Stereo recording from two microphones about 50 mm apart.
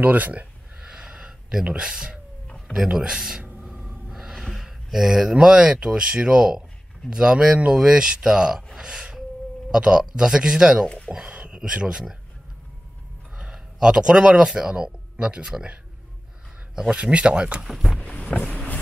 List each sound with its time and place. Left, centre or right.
0.0 s speech: right
0.7 s a sound: centre
1.7 s speech: centre
4.1 s gasp: centre
4.6 s speech: centre
8.7 s music: centre
9.7 s speech: centre
11.2 s a sound: right
11.7 s speech: centre
13.4 s speech: centre
17.6 s speech: centre
18.0 s vehicle: left
18.4 s vehicle: centre